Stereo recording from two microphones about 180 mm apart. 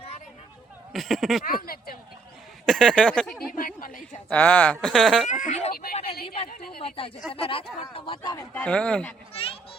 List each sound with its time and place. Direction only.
0.9 s speech: centre (ahead or behind)
1.5 s speech: 55° left (ahead or behind)
2.6 s speech: 5° left (ahead or behind)
3.5 s a woman's voice: 50° left (ahead or behind)
4.3 s speech: 10° left (ahead or behind)
5.3 s speech: 40° left (ahead or behind)
5.7 s a woman's voice: 55° left (ahead or behind)
6.8 s speech: 30° left (ahead or behind)
8.5 s speech: 5° left (ahead or behind)
9.3 s children playing: 30° left (ahead or behind)